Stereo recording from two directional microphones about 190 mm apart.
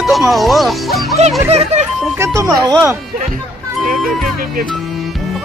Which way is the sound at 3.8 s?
Centre (ahead or behind).